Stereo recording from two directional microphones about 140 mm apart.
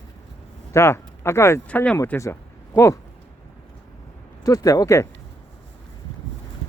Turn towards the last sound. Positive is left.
turn(degrees=25)  # may be behind; listen again after turning